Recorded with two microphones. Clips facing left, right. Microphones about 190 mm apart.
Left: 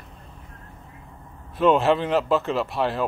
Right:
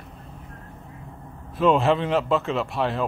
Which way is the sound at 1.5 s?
Centre (ahead or behind).